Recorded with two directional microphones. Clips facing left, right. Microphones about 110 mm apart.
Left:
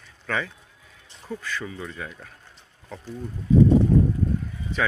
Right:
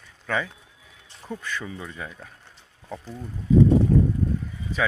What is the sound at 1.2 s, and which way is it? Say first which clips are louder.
Speech: left 1 dB; 15° right (ahead or behind).